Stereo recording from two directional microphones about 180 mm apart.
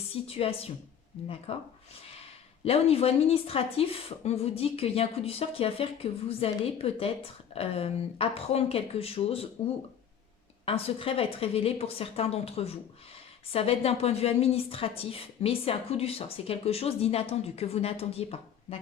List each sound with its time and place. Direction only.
0.3 s a woman's voice: 35° left (ahead or behind)
2.6 s a woman's voice: 35° left (ahead or behind)
10.7 s a woman's voice: 30° left (ahead or behind)